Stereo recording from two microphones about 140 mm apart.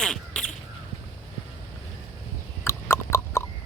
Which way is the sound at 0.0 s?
5° left (ahead or behind).